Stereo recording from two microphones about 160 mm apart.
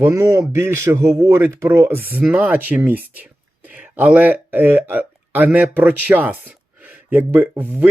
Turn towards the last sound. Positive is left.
turn(degrees=-15)  # may be behind; listen again after turning